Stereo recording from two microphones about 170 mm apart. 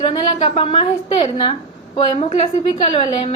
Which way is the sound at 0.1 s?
30° left (ahead or behind).